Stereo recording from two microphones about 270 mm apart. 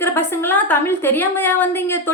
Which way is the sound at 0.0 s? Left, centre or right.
Centre.